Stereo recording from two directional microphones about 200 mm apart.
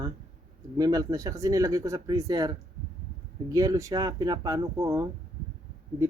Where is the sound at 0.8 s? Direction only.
20° right (ahead or behind).